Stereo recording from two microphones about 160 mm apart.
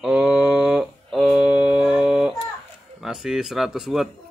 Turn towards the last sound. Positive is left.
turn(degrees=0)  # may be behind; listen again after turning